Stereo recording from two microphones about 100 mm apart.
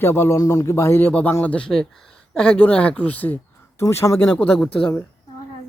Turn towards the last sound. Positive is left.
turn(degrees=15)  # may be behind; listen again after turning